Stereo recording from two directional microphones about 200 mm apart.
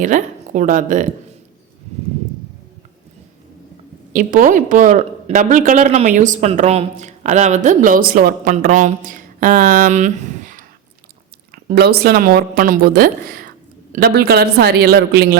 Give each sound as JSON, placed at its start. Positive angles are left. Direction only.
{"t": 0.0, "sound": "a woman's voice", "side_deg": -40}
{"t": 4.1, "sound": "a woman's voice", "side_deg": -40}
{"t": 11.5, "sound": "a woman's voice", "side_deg": -55}